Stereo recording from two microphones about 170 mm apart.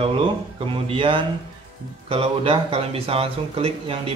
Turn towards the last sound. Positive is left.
turn(degrees=-35)  # may be behind; listen again after turning